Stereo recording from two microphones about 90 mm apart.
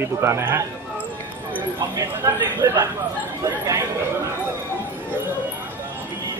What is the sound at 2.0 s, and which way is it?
Speech, 25° right (ahead or behind).